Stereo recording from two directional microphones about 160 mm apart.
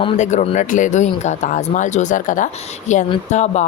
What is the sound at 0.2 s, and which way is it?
Speech, 50° left (ahead or behind).